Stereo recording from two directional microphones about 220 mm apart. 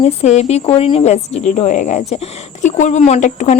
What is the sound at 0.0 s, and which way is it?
Speech, 30° left (ahead or behind).